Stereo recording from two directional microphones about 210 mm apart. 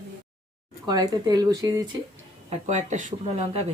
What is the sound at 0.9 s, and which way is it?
Speech, 20° right (ahead or behind).